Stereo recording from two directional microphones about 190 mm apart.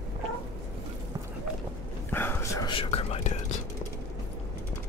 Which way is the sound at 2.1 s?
10° left (ahead or behind).